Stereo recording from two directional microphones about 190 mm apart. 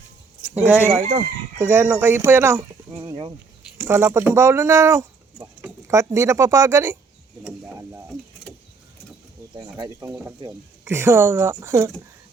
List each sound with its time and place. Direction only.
0.7 s speech: 10° right (ahead or behind)
3.8 s speech: 10° right (ahead or behind)
7.4 s mechanisms: 15° right (ahead or behind)
9.7 s speech: 20° right (ahead or behind)